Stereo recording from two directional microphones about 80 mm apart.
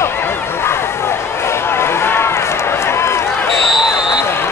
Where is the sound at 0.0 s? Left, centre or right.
Left.